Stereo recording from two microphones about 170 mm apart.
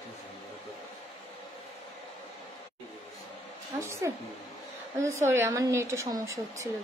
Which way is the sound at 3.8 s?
15° right (ahead or behind).